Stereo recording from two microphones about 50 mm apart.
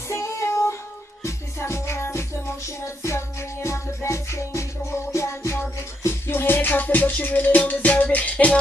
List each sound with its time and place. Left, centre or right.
0.1 s child singing: left
1.2 s music: left